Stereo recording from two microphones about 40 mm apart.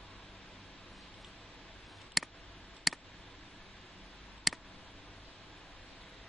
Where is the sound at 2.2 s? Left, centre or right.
Centre.